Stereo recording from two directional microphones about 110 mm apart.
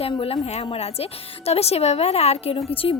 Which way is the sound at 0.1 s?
60° left (ahead or behind).